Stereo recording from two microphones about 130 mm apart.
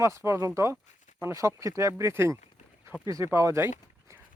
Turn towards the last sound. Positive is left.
turn(degrees=-20)  # may be behind; listen again after turning